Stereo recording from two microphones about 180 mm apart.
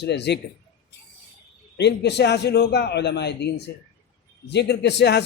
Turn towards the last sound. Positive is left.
turn(degrees=70)  # may be behind; listen again after turning